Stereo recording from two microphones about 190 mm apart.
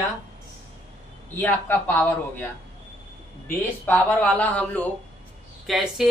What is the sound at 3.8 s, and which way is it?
Speech, 10° left (ahead or behind).